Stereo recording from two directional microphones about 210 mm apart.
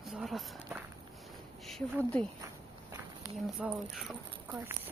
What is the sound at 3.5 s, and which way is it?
Speech, centre (ahead or behind).